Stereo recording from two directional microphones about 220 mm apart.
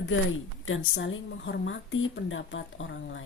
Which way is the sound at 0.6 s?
60° left (ahead or behind).